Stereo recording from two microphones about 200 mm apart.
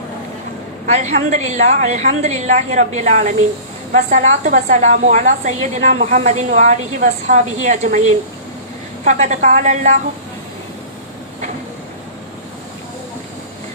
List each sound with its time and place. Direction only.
0.9 s a woman's voice: 35° right (ahead or behind)
9.0 s a woman's voice: 35° right (ahead or behind)